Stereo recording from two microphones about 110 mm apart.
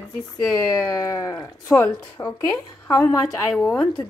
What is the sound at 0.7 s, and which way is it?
Speech, 35° left (ahead or behind).